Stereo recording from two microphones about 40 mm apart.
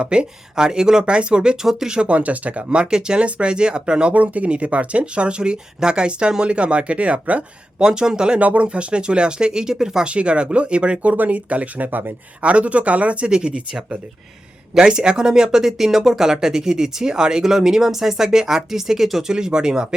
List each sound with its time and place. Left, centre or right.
0.0 s speech: right
2.6 s speech: right
4.1 s speech: right
7.8 s speech: centre
8.4 s speech: right; by 10.1 s centre
10.1 s speech: right
11.0 s speech: right
11.9 s speech: right
12.4 s speech: right; by 19.2 s centre
19.3 s speech: right